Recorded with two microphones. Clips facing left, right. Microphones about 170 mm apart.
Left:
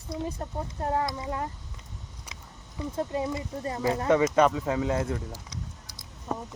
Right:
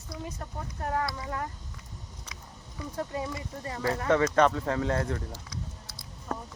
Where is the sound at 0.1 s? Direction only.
25° left (ahead or behind); by 5.2 s 10° left (ahead or behind).